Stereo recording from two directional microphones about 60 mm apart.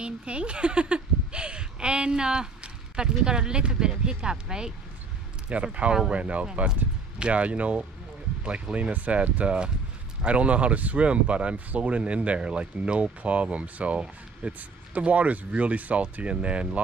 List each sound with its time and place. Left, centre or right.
0.0 s speech: centre